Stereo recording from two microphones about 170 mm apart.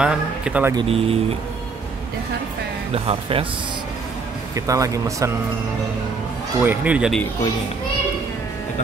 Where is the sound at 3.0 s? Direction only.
35° right (ahead or behind).